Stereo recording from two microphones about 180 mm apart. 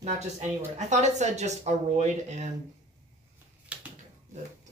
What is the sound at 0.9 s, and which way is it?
Speech, 40° right (ahead or behind).